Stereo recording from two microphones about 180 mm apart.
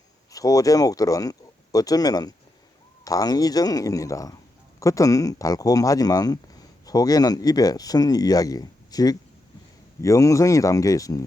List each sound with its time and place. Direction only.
0.3 s speech: 20° left (ahead or behind)